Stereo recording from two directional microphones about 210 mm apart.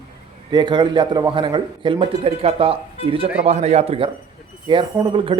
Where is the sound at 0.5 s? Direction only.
20° right (ahead or behind).